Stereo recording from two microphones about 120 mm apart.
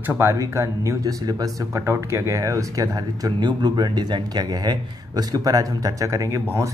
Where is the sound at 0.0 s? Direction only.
20° right (ahead or behind).